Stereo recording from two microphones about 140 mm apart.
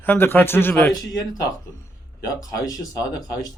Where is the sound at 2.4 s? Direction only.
25° left (ahead or behind).